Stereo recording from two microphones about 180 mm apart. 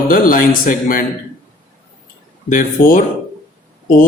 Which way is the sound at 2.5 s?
50° left (ahead or behind).